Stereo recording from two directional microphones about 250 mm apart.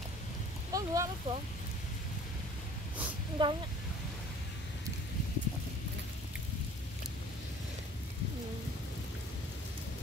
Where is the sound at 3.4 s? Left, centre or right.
Centre.